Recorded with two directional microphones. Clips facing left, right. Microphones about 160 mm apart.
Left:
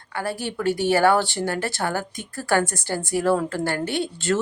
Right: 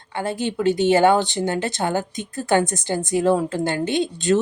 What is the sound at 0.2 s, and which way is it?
Speech, 20° right (ahead or behind).